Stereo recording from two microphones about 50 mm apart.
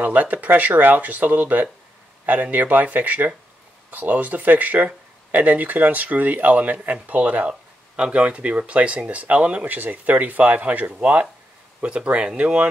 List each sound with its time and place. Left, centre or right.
0.0 s speech: right